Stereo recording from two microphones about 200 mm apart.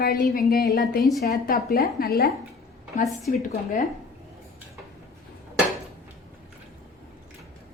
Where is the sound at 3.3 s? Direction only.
40° left (ahead or behind).